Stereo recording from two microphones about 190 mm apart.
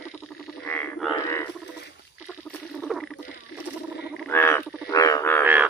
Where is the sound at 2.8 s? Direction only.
Centre (ahead or behind).